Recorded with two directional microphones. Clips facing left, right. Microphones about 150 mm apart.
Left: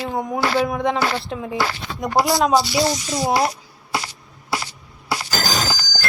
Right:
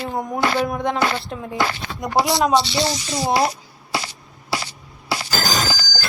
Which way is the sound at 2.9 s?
30° right (ahead or behind).